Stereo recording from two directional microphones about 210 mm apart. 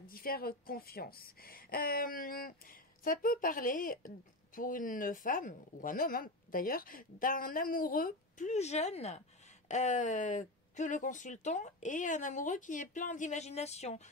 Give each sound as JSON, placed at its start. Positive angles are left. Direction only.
{"t": 0.0, "sound": "a woman's voice", "side_deg": 45}